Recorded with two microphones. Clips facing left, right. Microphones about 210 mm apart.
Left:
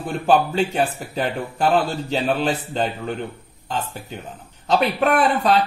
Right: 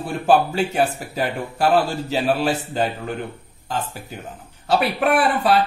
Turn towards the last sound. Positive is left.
turn(degrees=-5)  # may be behind; listen again after turning